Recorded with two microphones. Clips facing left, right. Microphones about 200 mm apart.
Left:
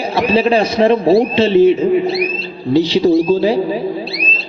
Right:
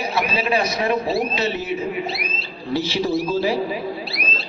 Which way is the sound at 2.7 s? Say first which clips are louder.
Left 10 dB; 15° left (ahead or behind).